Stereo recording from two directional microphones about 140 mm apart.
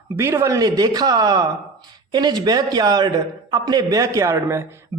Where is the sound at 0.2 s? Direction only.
20° right (ahead or behind).